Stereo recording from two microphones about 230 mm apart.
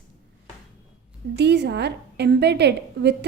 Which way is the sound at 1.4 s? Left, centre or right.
Right.